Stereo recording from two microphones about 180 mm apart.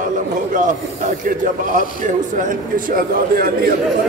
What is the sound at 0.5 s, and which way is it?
A man's voice, 45° right (ahead or behind).